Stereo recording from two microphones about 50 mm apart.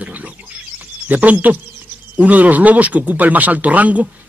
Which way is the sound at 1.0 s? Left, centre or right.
Right.